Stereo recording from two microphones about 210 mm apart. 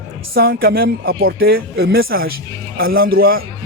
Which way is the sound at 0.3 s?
45° right (ahead or behind).